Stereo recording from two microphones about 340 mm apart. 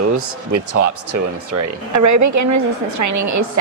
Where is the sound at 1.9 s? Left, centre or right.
Right.